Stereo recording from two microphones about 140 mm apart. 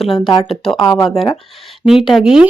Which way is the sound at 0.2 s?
30° left (ahead or behind).